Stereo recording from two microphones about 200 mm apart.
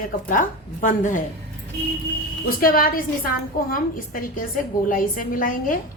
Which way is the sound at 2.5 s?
45° left (ahead or behind).